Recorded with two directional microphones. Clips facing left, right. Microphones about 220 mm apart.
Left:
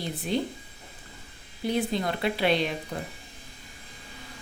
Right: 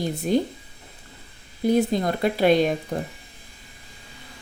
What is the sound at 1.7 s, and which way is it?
Speech, 45° right (ahead or behind).